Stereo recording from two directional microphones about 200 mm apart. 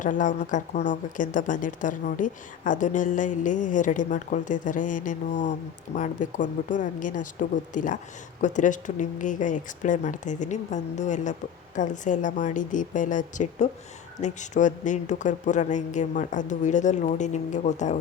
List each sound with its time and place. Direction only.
0.0 s speech: 40° left (ahead or behind)